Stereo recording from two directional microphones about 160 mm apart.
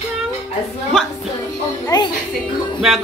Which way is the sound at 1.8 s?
25° left (ahead or behind).